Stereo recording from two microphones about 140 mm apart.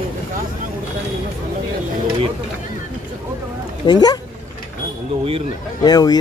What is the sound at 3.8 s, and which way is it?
Speech, 30° left (ahead or behind).